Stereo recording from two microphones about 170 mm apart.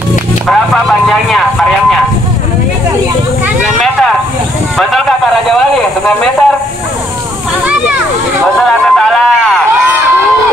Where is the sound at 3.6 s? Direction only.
Centre (ahead or behind).